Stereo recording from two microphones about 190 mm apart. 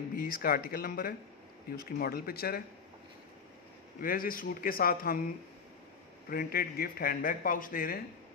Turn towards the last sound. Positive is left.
turn(degrees=50)  # may be behind; listen again after turning